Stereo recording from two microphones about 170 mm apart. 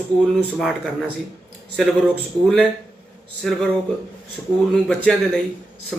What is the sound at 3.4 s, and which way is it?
Speech, 5° left (ahead or behind).